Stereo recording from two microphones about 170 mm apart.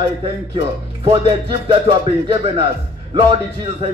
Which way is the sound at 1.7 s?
30° right (ahead or behind).